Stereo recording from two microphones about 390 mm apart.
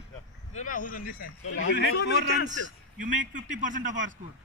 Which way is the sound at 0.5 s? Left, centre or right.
Centre.